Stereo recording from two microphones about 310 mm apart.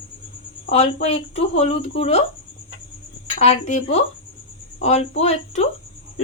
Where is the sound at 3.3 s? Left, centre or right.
Left.